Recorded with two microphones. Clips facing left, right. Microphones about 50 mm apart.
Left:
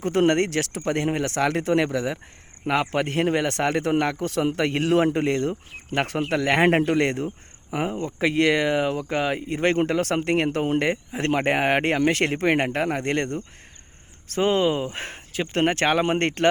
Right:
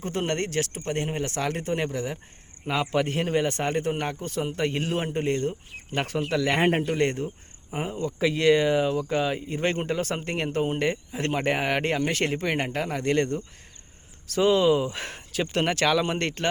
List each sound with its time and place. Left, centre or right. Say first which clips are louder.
0.0 s a man's voice: left 8 dB; left
5.9 s a man's voice: left 3 dB; left
7.9 s speech: left 2 dB; left